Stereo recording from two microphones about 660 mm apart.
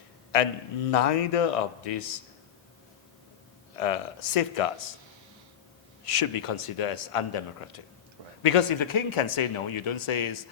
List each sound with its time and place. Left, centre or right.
0.3 s a man's voice: left
3.8 s a man's voice: left
6.1 s speech: left